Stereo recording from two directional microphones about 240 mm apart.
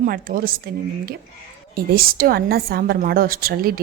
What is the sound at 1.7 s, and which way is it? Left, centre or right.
Speech, right.